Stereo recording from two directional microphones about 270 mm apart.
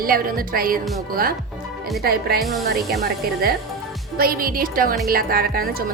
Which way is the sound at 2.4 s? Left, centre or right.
Centre.